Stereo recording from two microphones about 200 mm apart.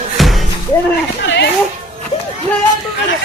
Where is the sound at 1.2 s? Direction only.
60° left (ahead or behind).